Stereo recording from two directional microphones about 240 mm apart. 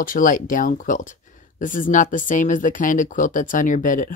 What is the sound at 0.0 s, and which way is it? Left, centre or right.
Speech, left.